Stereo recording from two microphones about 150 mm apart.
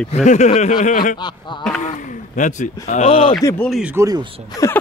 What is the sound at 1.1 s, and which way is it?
Speech, 30° left (ahead or behind).